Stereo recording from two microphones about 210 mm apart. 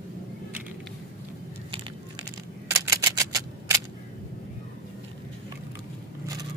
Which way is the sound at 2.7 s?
15° right (ahead or behind).